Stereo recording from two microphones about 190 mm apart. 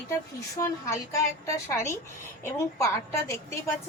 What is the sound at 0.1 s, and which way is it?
A woman's voice, 15° left (ahead or behind).